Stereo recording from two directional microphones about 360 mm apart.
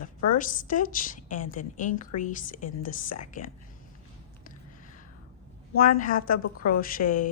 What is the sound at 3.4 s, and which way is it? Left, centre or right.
Speech, left.